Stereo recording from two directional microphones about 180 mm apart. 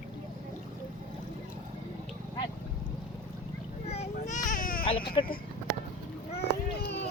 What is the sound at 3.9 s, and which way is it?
Baby cry, 40° left (ahead or behind).